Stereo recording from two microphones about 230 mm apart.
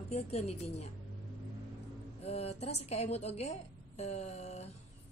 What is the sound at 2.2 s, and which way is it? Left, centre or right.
A woman's voice, left.